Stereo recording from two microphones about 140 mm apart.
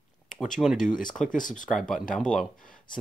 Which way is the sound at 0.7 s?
65° left (ahead or behind).